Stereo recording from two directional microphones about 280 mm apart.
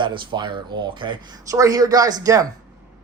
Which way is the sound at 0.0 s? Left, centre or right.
Centre.